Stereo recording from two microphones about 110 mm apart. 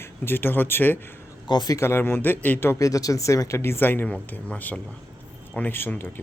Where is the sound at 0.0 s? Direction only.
20° left (ahead or behind).